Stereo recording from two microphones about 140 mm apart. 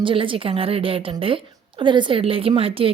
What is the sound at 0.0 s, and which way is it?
A woman's voice, 40° right (ahead or behind).